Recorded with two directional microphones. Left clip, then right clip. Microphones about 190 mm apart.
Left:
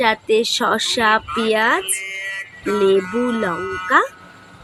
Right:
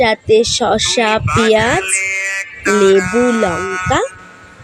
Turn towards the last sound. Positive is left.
turn(degrees=-25)  # may be behind; listen again after turning